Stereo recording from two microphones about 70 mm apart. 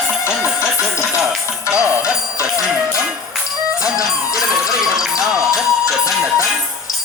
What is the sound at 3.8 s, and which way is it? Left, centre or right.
Music, centre.